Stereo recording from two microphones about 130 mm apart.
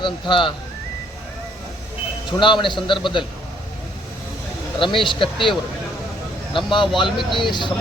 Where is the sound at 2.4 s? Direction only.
40° left (ahead or behind).